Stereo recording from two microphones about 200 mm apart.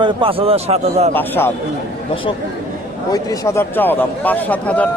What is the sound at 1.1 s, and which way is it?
Speech, 10° left (ahead or behind).